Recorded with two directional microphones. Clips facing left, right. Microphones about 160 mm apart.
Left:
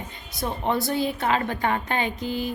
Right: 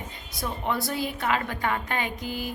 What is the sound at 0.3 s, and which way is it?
A woman's voice, 25° left (ahead or behind).